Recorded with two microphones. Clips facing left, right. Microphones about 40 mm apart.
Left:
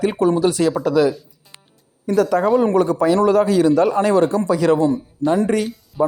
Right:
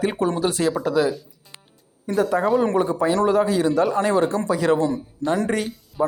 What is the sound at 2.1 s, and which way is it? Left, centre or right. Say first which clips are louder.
Speech: left 4 dB; centre.